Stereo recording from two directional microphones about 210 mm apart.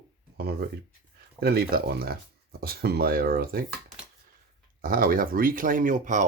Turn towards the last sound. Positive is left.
turn(degrees=-35)  # may be behind; listen again after turning